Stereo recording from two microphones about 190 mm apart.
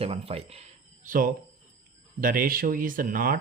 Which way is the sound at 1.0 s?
45° right (ahead or behind).